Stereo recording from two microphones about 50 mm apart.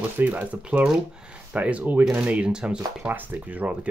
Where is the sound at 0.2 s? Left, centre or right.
Right.